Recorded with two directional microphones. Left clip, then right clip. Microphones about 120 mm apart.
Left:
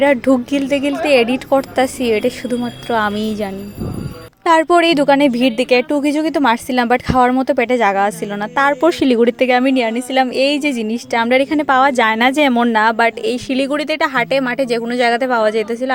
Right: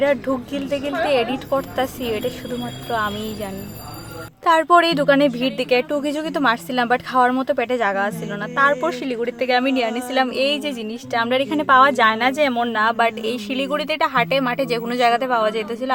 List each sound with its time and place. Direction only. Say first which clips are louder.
0.0 s speech: left 6 dB; 45° left (ahead or behind)
4.4 s speech: left 3 dB; 30° left (ahead or behind)
9.0 s a woman's voice: left 10 dB; 65° left (ahead or behind)
9.5 s speech: left 4 dB; 40° left (ahead or behind); by 12.6 s 60° left (ahead or behind)
12.6 s speech: left 5 dB; 45° left (ahead or behind)